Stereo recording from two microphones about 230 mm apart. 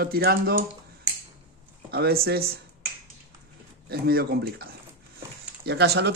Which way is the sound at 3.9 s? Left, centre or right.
Right.